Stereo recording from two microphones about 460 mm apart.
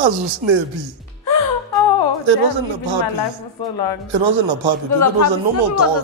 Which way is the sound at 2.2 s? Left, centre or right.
Right.